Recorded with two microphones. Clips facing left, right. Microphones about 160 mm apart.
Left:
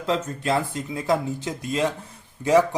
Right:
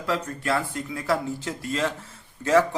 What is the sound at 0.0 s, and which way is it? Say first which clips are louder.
A man's voice: left 2 dB; 20° left (ahead or behind).